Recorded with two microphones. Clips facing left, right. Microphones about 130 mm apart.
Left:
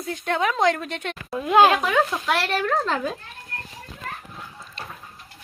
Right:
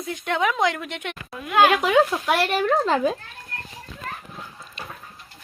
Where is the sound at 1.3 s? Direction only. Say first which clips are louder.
Left 2 dB; 25° left (ahead or behind).